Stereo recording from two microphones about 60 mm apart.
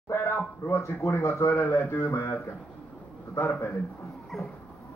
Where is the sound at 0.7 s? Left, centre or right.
Left.